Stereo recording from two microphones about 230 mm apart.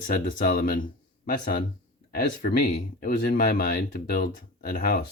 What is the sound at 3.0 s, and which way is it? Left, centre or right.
Speech, left.